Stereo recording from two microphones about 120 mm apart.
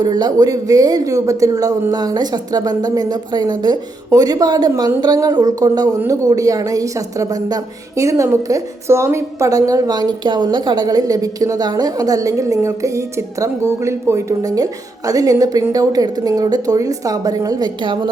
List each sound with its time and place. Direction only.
0.0 s a woman's voice: 35° right (ahead or behind)